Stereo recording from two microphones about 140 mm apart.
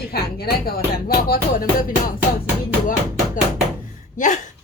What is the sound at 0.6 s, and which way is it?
Music, 90° left.